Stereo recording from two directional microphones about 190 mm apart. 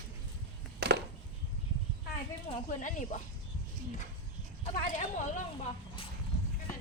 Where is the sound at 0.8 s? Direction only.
60° right (ahead or behind).